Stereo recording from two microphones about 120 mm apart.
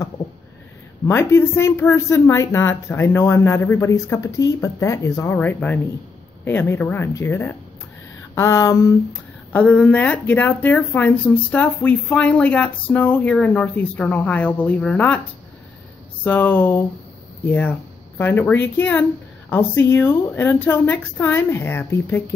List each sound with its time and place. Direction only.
1.0 s speech: 20° left (ahead or behind)
9.5 s speech: 10° left (ahead or behind)
16.3 s speech: 15° left (ahead or behind)